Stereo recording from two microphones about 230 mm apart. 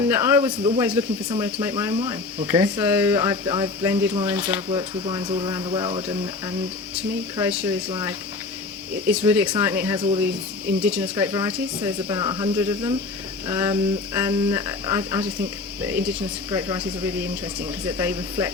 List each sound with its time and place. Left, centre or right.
0.0 s speech: centre
2.5 s speech: centre
4.8 s speech: centre
7.3 s speech: centre
7.9 s speech: centre
9.0 s speech: centre
10.7 s speech: centre
11.3 s speech: centre